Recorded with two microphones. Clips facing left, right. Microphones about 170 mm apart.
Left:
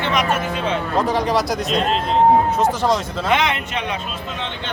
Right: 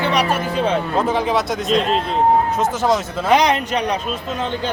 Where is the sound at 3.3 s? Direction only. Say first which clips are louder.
Right 5 dB; 40° right (ahead or behind).